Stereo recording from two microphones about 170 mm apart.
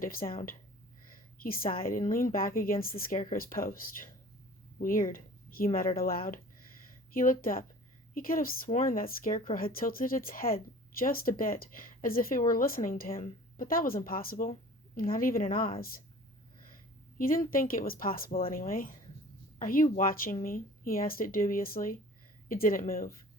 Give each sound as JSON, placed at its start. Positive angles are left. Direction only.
{"t": 0.0, "sound": "speech", "side_deg": 60}
{"t": 17.2, "sound": "speech", "side_deg": 55}